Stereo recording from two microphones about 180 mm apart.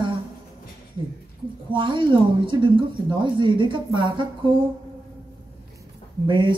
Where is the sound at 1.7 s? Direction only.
25° right (ahead or behind).